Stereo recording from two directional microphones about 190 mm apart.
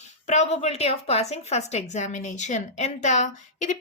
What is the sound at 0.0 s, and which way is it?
A woman's voice, 35° left (ahead or behind).